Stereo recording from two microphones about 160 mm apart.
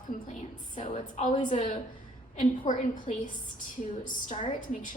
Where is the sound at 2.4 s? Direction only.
55° left (ahead or behind).